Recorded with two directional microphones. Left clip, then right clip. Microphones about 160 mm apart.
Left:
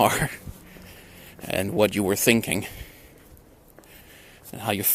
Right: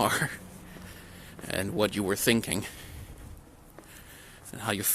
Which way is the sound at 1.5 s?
35° left (ahead or behind).